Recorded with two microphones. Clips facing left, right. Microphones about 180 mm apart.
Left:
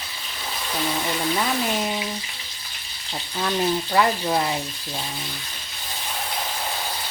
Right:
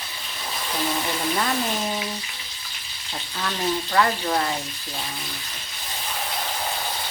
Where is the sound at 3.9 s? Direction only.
15° left (ahead or behind).